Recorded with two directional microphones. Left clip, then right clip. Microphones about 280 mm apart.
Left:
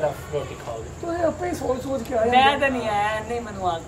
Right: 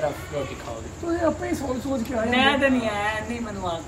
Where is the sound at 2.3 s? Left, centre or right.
Centre.